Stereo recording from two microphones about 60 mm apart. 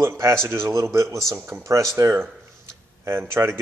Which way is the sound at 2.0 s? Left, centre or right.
Right.